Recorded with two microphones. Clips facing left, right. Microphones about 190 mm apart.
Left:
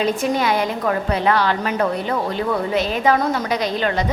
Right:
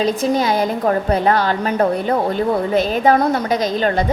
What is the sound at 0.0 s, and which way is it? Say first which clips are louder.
A woman's voice: right 2 dB; 35° right (ahead or behind).